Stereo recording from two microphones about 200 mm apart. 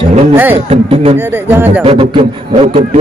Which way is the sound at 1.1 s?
10° right (ahead or behind).